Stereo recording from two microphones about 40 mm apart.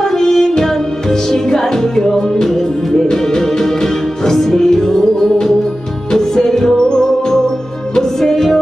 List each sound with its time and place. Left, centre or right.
0.0 s music: centre
8.2 s music: centre